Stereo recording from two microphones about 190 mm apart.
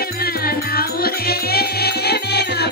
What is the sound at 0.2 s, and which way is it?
Music, 55° left (ahead or behind).